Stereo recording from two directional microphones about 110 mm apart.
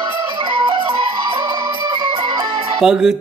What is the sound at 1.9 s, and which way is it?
Music, 45° right (ahead or behind).